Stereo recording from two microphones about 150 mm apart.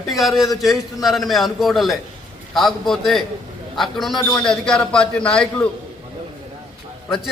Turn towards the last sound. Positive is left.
turn(degrees=0)  # may be behind; listen again after turning